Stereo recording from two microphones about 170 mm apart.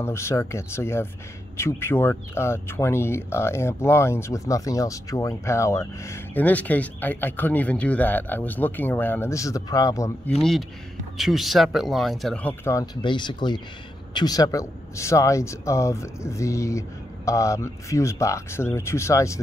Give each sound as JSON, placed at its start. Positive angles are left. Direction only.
{"t": 0.0, "sound": "speech", "side_deg": 15}
{"t": 11.1, "sound": "speech", "side_deg": 0}
{"t": 13.0, "sound": "speech", "side_deg": 25}